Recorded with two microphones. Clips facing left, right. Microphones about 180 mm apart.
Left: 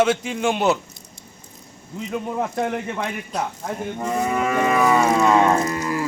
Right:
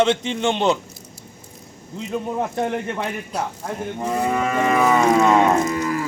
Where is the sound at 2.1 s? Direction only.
10° right (ahead or behind).